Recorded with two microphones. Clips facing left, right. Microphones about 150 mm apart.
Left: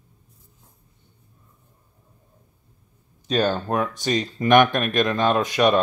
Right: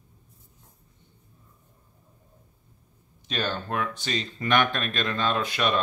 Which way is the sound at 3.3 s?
45° left (ahead or behind).